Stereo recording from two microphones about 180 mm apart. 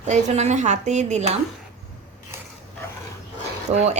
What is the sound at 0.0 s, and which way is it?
A woman's voice, 40° right (ahead or behind).